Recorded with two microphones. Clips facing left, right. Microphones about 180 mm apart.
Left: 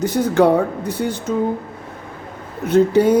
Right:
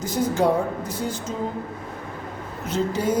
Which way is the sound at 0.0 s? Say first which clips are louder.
Left 6 dB; 65° left (ahead or behind).